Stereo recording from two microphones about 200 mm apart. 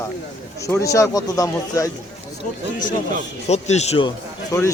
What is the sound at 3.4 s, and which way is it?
Speech, 35° left (ahead or behind).